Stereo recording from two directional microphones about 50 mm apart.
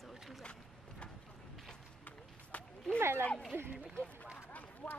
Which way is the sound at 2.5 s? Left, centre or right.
Left.